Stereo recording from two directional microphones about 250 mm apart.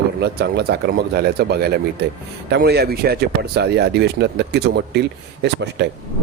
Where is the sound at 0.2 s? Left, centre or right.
Right.